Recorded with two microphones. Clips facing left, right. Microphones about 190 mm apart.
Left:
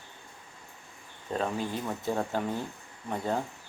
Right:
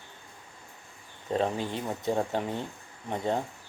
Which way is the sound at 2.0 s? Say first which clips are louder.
Right 3 dB; 20° right (ahead or behind).